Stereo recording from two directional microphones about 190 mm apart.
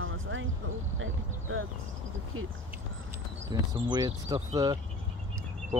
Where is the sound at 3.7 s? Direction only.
25° right (ahead or behind).